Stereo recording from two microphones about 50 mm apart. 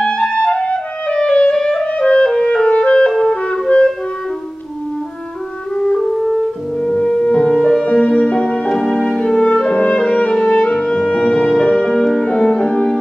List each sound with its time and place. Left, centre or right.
0.0 s clarinet: centre
3.1 s clarinet: centre
3.5 s clarinet: centre
5.8 s music: centre
6.2 s french horn: centre
7.2 s music: centre
8.6 s music: centre